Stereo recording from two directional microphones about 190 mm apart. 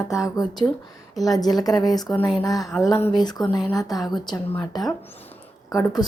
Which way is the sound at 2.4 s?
20° left (ahead or behind).